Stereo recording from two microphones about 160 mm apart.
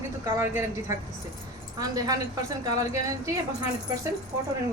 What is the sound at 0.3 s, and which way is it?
Speech, 15° right (ahead or behind).